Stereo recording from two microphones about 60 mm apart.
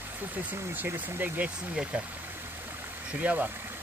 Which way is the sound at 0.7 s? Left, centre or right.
Right.